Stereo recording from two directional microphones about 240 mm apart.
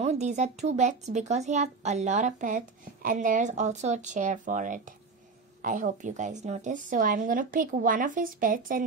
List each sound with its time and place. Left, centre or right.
0.0 s a woman's voice: right